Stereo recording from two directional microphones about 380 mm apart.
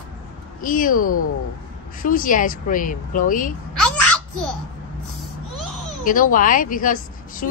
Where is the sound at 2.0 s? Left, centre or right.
Left.